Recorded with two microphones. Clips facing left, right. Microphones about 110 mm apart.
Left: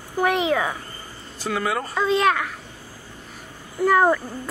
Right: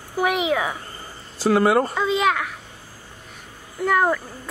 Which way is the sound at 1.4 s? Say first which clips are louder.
Right 8 dB; 50° right (ahead or behind).